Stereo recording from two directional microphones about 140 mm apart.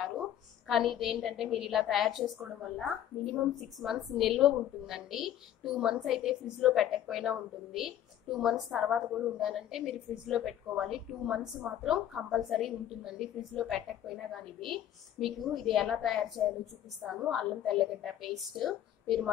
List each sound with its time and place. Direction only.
0.0 s a woman's voice: centre (ahead or behind)